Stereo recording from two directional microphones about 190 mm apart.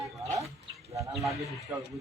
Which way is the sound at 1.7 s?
10° right (ahead or behind).